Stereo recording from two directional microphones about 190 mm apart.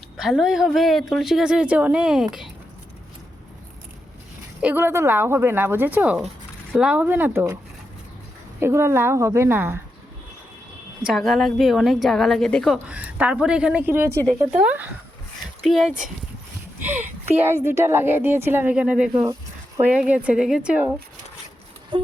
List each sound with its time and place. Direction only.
0.2 s a woman's voice: 5° right (ahead or behind)
4.6 s a woman's voice: 10° right (ahead or behind)
8.6 s a woman's voice: 15° right (ahead or behind)
11.0 s a woman's voice: centre (ahead or behind)
19.2 s a sound: 15° right (ahead or behind)
19.9 s a woman's voice: 5° right (ahead or behind)
21.9 s speech: 25° right (ahead or behind)